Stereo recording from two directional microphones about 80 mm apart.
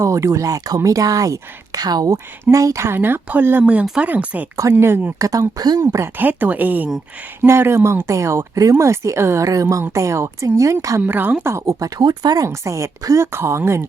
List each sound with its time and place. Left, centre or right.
0.0 s speech: right
2.1 s a woman's voice: right
5.2 s speech: right
5.8 s speech: right
6.1 s a woman's voice: right
11.0 s a woman's voice: right
11.6 s speech: right
12.5 s speech: right